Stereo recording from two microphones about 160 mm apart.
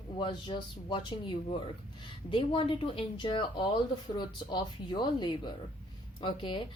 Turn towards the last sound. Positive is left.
turn(degrees=30)  # may be behind; listen again after turning